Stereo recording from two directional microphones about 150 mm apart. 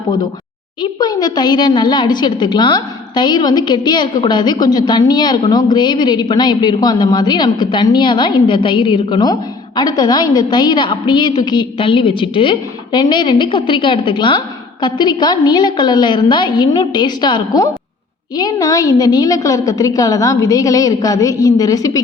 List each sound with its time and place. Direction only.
0.8 s a woman's voice: 25° left (ahead or behind)